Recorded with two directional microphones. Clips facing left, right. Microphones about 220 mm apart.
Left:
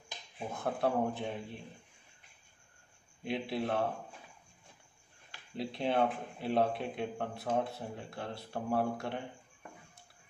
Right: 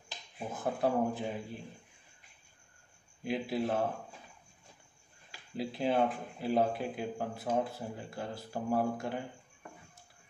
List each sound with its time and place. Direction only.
0.4 s speech: 5° right (ahead or behind)
3.3 s speech: centre (ahead or behind)
5.3 s speech: 5° right (ahead or behind)